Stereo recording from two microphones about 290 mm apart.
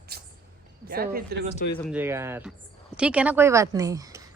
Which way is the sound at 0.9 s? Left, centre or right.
Right.